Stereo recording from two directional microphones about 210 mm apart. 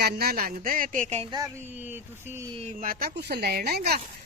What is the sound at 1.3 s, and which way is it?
Speech, 15° right (ahead or behind).